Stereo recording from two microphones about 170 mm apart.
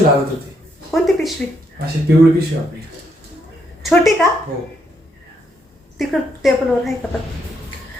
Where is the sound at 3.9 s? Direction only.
5° left (ahead or behind).